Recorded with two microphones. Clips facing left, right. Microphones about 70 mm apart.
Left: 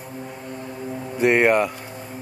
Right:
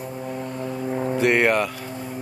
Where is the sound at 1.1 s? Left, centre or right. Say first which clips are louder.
Left 3 dB; centre.